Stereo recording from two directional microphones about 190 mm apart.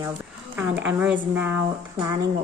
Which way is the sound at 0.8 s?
10° right (ahead or behind).